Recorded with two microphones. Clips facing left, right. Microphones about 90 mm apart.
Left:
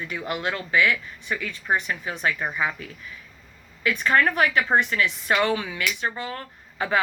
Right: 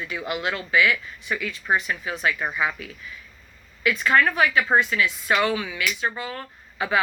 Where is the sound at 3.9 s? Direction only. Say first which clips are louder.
Right 1 dB; 40° left (ahead or behind).